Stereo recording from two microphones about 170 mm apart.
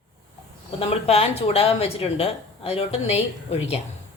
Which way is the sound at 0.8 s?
35° left (ahead or behind).